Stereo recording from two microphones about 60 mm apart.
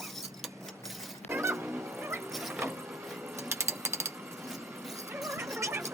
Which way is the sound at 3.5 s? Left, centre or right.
Right.